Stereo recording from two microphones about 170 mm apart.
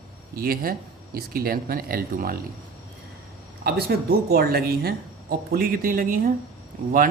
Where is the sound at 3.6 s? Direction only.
65° right (ahead or behind).